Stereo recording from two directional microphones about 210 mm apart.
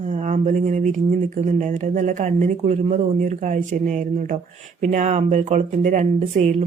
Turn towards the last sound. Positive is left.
turn(degrees=-35)  # may be behind; listen again after turning